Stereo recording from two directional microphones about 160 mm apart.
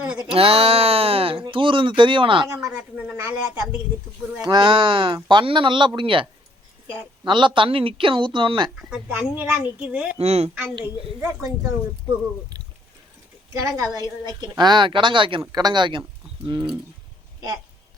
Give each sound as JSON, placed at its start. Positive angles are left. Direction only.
{"t": 0.0, "sound": "a sound", "side_deg": -5}
{"t": 0.3, "sound": "speech", "side_deg": -35}
{"t": 2.5, "sound": "a woman's voice", "side_deg": -20}
{"t": 2.7, "sound": "a sound", "side_deg": -5}
{"t": 4.4, "sound": "a woman's voice", "side_deg": -25}
{"t": 7.3, "sound": "speech", "side_deg": -30}
{"t": 8.7, "sound": "speech", "side_deg": -5}
{"t": 10.2, "sound": "speech", "side_deg": -40}
{"t": 10.8, "sound": "speech", "side_deg": -15}
{"t": 13.5, "sound": "a woman's voice", "side_deg": -20}